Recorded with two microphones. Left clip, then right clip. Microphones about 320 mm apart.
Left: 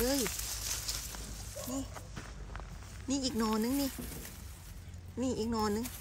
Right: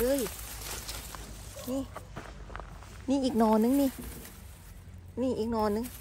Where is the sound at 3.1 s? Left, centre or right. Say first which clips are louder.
Right 8 dB; centre.